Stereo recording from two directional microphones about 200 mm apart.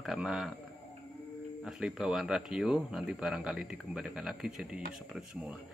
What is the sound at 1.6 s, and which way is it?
Speech, centre (ahead or behind).